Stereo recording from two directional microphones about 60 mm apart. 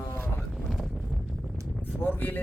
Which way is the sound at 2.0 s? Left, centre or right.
Left.